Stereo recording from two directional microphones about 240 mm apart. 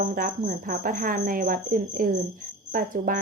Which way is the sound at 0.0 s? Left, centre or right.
Right.